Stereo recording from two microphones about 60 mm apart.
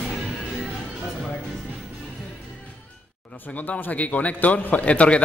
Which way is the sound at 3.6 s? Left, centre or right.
Left.